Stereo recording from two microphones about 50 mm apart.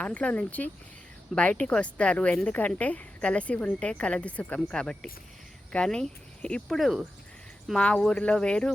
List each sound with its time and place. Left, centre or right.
0.0 s a woman's voice: left
4.7 s speech: centre
6.7 s speech: centre
7.8 s a woman's voice: left